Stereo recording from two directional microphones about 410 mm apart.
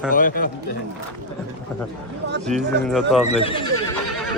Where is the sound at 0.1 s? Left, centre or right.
Centre.